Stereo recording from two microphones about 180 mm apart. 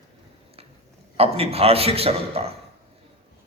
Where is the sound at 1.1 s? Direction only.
35° right (ahead or behind).